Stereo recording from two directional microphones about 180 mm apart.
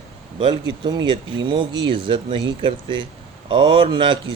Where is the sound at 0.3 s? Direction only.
25° right (ahead or behind).